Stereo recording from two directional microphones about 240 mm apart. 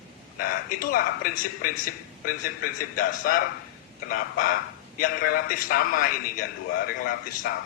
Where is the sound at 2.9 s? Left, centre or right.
Left.